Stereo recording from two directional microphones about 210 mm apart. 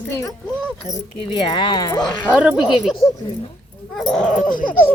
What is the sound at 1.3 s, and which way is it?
Speech, 20° left (ahead or behind).